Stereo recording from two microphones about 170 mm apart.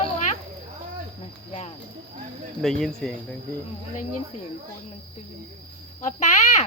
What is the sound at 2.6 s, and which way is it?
Speech, centre (ahead or behind).